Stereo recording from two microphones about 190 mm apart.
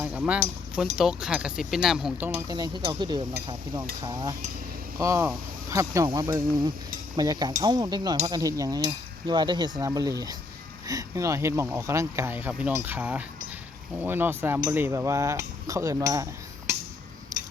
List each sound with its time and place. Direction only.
0.0 s speech: 5° right (ahead or behind)
2.5 s speech: 20° right (ahead or behind)
17.3 s tick-tock: 20° right (ahead or behind)